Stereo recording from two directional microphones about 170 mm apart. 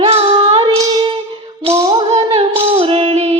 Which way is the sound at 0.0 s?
35° right (ahead or behind).